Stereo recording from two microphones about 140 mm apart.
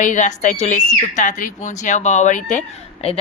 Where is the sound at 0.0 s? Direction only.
60° left (ahead or behind).